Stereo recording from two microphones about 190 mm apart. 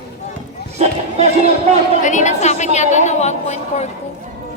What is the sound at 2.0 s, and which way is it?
A woman's voice, 40° left (ahead or behind).